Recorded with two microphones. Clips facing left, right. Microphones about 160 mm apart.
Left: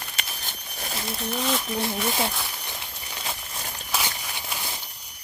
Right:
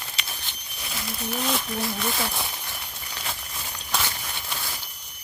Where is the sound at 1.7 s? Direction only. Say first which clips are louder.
Left 2 dB; 25° left (ahead or behind).